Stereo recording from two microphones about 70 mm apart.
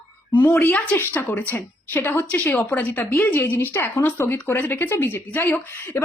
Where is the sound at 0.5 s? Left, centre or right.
Left.